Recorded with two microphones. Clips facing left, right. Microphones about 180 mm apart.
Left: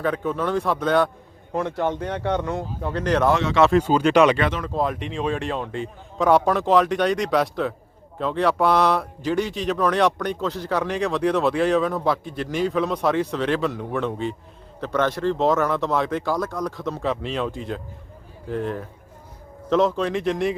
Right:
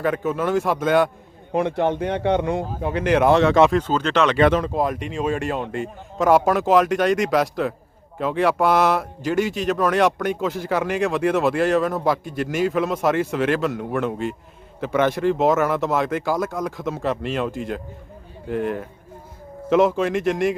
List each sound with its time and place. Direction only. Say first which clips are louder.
0.0 s speech: right 2 dB; 5° right (ahead or behind)
1.5 s speech: right 3 dB; 20° right (ahead or behind)
3.7 s speech: left 3 dB; 10° left (ahead or behind)
4.4 s speech: right 7 dB; 45° right (ahead or behind)
4.6 s speech: right 2 dB; 15° right (ahead or behind)
4.9 s speech: right 2 dB; centre (ahead or behind)